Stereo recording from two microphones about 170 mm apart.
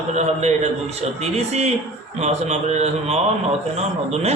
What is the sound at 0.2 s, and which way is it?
A man's voice, 40° right (ahead or behind).